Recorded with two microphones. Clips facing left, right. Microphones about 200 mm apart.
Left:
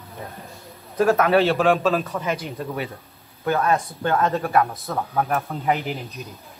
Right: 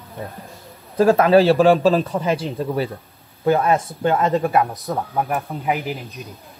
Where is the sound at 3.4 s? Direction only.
20° right (ahead or behind).